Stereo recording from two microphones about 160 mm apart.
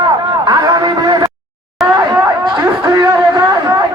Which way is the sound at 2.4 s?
25° right (ahead or behind).